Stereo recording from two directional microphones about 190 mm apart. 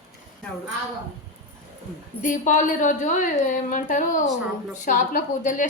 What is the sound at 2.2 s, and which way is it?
Speech, 45° left (ahead or behind).